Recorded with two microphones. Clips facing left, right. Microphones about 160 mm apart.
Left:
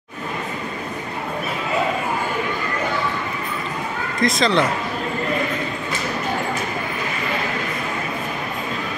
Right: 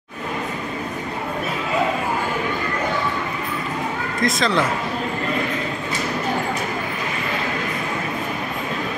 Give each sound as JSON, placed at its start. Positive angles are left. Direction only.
{"t": 4.2, "sound": "speech", "side_deg": 0}